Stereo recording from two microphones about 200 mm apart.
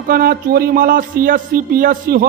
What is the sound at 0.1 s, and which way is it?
Speech, 45° right (ahead or behind).